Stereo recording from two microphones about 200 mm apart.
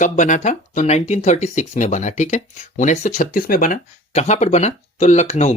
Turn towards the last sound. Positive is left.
turn(degrees=30)  # may be behind; listen again after turning